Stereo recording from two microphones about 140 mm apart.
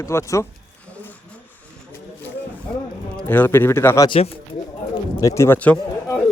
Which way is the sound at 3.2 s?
15° left (ahead or behind).